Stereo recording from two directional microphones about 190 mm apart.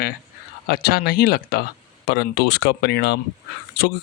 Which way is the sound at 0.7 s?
55° left (ahead or behind).